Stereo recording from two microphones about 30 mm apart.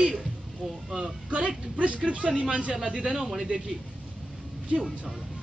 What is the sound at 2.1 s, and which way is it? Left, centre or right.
Speech, right.